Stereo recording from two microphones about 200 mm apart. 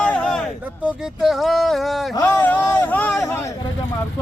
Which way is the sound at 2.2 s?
10° left (ahead or behind).